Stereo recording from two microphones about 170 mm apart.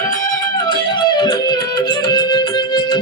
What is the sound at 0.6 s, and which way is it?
Music, 25° left (ahead or behind).